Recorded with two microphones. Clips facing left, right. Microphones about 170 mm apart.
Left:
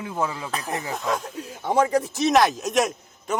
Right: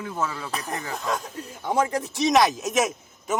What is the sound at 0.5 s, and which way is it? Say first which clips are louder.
A man's voice: left 2 dB; centre (ahead or behind).